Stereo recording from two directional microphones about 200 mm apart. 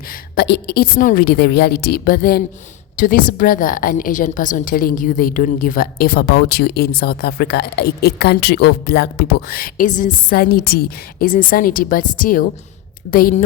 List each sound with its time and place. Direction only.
0.1 s a woman's voice: 55° left (ahead or behind)